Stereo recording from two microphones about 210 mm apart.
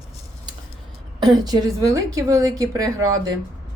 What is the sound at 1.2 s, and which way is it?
A woman's voice, 20° right (ahead or behind).